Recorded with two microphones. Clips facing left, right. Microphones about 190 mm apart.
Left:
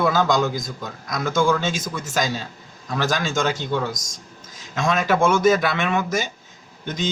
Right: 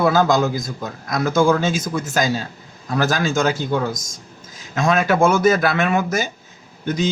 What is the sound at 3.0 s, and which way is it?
Speech, 5° right (ahead or behind).